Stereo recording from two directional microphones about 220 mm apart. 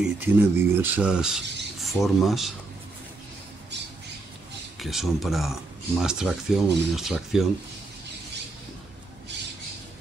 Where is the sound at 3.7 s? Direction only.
50° right (ahead or behind).